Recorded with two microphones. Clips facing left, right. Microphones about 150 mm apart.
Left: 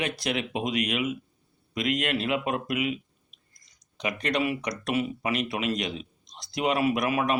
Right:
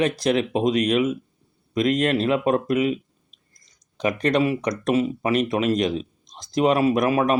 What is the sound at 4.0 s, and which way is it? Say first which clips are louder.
A man's voice: right 7 dB; 40° right (ahead or behind).